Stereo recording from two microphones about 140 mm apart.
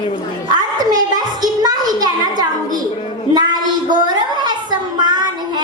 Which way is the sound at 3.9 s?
30° right (ahead or behind).